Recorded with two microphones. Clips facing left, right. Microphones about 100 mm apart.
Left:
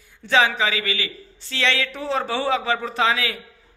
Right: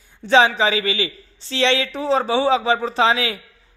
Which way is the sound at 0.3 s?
25° right (ahead or behind).